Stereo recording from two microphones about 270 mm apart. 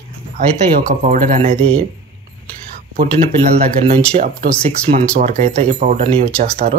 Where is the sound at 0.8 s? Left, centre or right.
Right.